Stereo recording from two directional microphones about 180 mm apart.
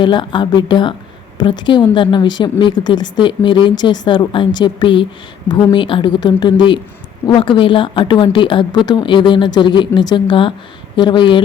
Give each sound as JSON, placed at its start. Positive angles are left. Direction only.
{"t": 0.0, "sound": "speech", "side_deg": 25}